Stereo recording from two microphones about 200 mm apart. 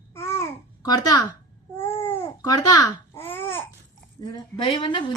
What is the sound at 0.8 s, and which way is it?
Speech, 20° left (ahead or behind).